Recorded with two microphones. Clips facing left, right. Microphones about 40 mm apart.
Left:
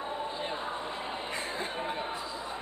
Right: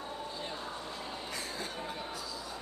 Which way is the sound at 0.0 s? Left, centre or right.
Left.